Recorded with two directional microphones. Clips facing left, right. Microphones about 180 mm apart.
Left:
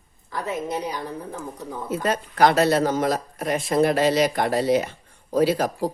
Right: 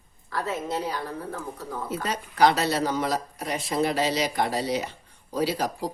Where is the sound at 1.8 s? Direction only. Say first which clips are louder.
Left 7 dB; 50° left (ahead or behind).